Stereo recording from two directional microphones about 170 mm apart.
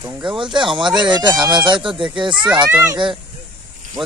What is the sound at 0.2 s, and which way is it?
Speech, 30° right (ahead or behind).